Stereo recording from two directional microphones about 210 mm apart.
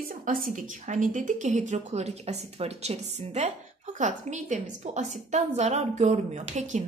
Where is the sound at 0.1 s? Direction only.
40° right (ahead or behind).